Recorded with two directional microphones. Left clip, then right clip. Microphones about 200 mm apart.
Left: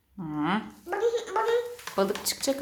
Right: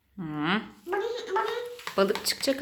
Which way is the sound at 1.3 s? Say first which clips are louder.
Right 4 dB; 25° left (ahead or behind).